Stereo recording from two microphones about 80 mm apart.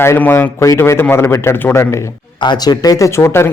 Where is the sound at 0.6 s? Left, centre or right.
Left.